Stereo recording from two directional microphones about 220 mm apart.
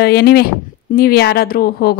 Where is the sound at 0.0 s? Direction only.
45° left (ahead or behind).